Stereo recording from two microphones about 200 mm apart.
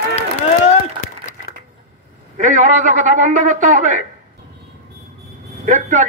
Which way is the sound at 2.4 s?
40° right (ahead or behind).